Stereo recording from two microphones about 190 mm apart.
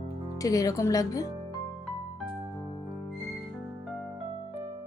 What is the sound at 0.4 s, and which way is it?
Speech, 20° left (ahead or behind).